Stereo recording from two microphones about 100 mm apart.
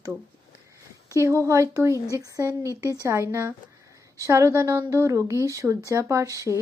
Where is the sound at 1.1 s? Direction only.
30° right (ahead or behind).